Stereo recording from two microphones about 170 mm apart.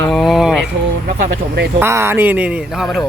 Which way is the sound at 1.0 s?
60° right (ahead or behind).